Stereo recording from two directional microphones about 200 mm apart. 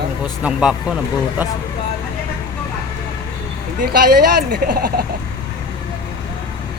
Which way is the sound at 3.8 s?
45° right (ahead or behind).